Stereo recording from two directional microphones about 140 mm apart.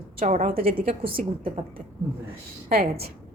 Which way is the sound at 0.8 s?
40° right (ahead or behind).